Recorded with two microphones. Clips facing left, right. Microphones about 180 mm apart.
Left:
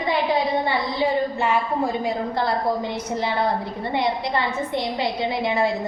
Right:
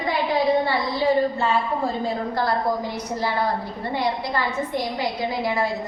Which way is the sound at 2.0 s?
25° left (ahead or behind).